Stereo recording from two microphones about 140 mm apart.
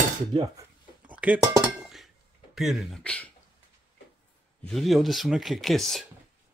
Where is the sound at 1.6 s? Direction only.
Centre (ahead or behind).